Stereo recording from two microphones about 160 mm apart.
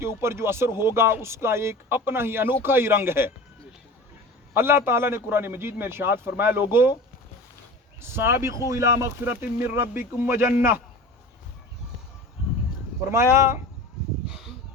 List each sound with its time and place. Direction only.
0.0 s speech: 15° right (ahead or behind)
4.5 s speech: 15° right (ahead or behind)
8.0 s speech: 15° right (ahead or behind)
13.1 s speech: 15° right (ahead or behind)